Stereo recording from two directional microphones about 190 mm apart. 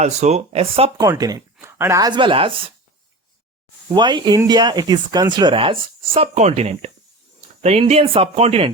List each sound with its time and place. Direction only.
0.0 s speech: 35° right (ahead or behind)
0.9 s speech: 20° right (ahead or behind)
3.8 s speech: 25° right (ahead or behind)